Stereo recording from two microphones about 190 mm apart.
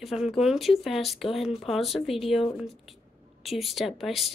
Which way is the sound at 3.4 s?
Centre (ahead or behind).